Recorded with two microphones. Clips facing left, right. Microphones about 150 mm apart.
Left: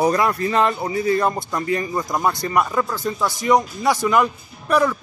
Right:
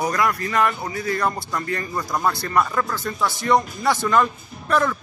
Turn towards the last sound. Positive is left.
turn(degrees=10)  # may be behind; listen again after turning